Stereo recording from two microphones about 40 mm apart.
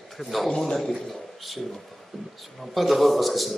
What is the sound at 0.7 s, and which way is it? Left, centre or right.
Speech, centre.